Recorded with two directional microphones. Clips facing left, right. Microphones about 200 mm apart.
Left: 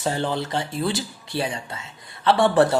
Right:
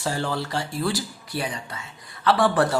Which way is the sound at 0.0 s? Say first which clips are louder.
Left 2 dB; 20° left (ahead or behind).